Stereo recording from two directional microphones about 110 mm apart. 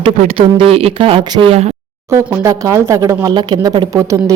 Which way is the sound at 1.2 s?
40° right (ahead or behind).